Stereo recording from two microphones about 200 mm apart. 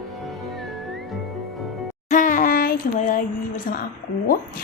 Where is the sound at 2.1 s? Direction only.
40° left (ahead or behind).